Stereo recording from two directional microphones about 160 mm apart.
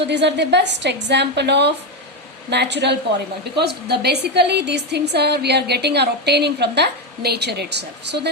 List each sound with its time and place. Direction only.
0.1 s a woman's voice: 90° right